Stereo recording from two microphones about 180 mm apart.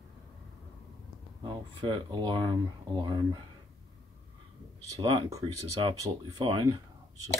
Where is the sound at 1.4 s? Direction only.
25° right (ahead or behind).